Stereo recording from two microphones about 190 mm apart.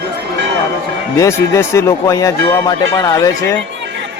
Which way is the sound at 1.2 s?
15° left (ahead or behind).